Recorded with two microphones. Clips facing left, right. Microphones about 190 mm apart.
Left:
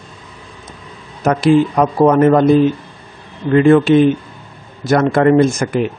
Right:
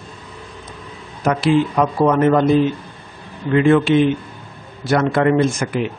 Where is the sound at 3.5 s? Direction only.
40° left (ahead or behind).